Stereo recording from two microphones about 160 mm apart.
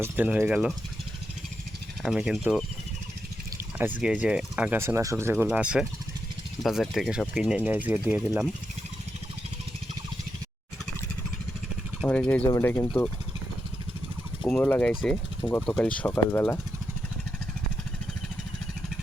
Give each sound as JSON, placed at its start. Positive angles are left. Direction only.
{"t": 0.0, "sound": "speech", "side_deg": -10}
{"t": 2.0, "sound": "speech", "side_deg": -5}
{"t": 3.8, "sound": "speech", "side_deg": -10}
{"t": 12.0, "sound": "speech", "side_deg": 5}
{"t": 12.5, "sound": "speech", "side_deg": 20}
{"t": 14.4, "sound": "speech", "side_deg": 10}